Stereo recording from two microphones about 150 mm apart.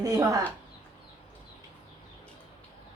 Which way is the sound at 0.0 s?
25° right (ahead or behind).